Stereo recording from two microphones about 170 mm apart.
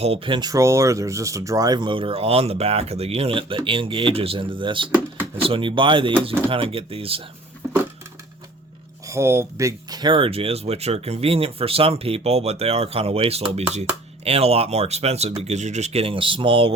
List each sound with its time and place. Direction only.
0.0 s speech: 30° right (ahead or behind)
9.0 s speech: 15° right (ahead or behind); by 16.7 s 30° right (ahead or behind)